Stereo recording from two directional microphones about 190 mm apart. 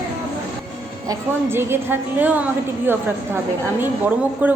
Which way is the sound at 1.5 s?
10° right (ahead or behind).